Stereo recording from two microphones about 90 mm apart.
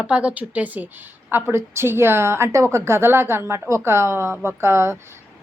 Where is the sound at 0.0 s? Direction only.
15° right (ahead or behind).